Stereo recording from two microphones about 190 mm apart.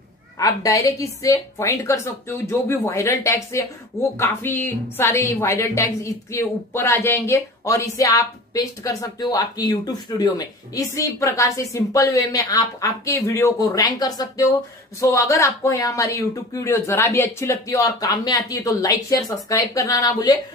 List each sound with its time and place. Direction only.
0.4 s a woman's voice: 20° left (ahead or behind)